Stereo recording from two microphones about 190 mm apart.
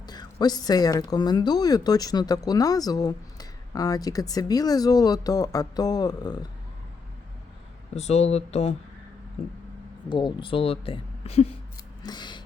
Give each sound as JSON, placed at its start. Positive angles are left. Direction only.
{"t": 0.0, "sound": "a woman's voice", "side_deg": 20}
{"t": 7.9, "sound": "speech", "side_deg": 35}
{"t": 10.1, "sound": "a woman's voice", "side_deg": 25}
{"t": 12.0, "sound": "a sound", "side_deg": 25}